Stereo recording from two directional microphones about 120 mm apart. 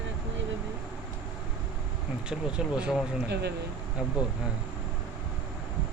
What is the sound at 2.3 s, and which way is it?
Speech, 5° right (ahead or behind).